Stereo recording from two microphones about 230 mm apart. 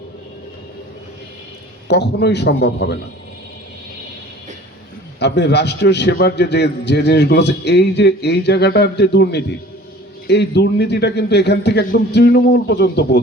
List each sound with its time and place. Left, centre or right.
1.9 s a man's voice: left
5.2 s a man's voice: left